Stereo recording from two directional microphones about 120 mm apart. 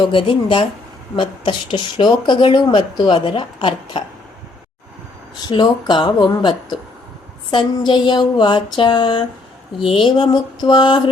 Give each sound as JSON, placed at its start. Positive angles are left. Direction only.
{"t": 0.0, "sound": "speech", "side_deg": 45}
{"t": 5.4, "sound": "speech", "side_deg": 35}